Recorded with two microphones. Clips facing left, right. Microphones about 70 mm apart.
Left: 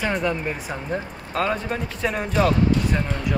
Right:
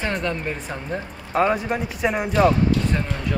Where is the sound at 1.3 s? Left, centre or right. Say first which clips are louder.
Right 4 dB; centre.